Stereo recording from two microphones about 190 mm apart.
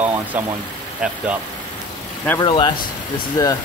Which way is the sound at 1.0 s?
5° right (ahead or behind).